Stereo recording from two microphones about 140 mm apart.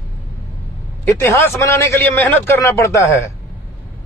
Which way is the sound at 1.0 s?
20° left (ahead or behind).